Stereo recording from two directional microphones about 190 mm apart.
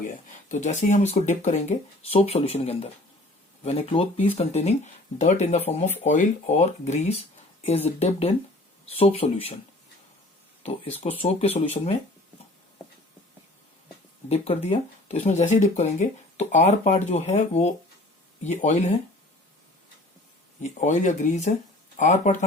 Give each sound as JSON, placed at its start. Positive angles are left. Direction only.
{"t": 0.3, "sound": "speech", "side_deg": 40}
{"t": 10.6, "sound": "speech", "side_deg": 30}
{"t": 14.3, "sound": "speech", "side_deg": 30}
{"t": 20.6, "sound": "speech", "side_deg": 40}